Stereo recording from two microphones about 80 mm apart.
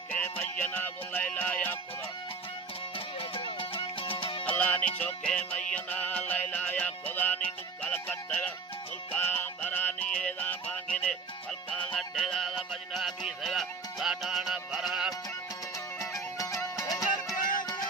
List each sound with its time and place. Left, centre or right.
0.1 s music: left
3.4 s music: left
4.4 s music: centre
16.0 s music: left